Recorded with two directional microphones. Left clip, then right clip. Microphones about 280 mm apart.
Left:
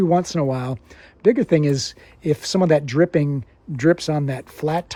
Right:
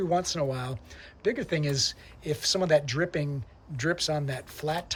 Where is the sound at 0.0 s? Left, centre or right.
Left.